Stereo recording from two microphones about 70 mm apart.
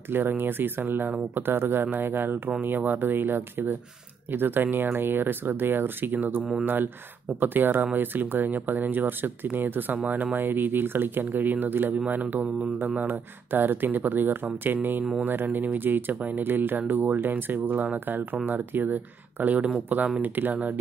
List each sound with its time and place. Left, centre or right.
0.1 s speech: right
13.0 s speech: right